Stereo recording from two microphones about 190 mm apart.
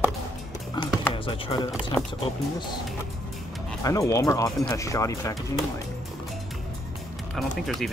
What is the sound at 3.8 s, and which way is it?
Speech, 20° left (ahead or behind).